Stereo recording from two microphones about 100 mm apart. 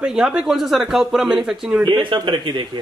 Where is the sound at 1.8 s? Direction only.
50° right (ahead or behind).